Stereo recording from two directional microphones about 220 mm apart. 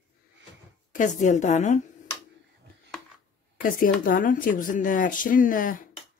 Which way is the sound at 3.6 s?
40° left (ahead or behind).